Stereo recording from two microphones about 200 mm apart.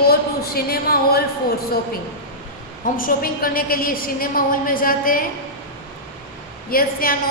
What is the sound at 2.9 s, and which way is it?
A woman's voice, 45° left (ahead or behind).